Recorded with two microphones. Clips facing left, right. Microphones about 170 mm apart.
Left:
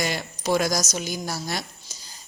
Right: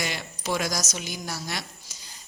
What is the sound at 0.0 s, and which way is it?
A woman's voice, 40° left (ahead or behind).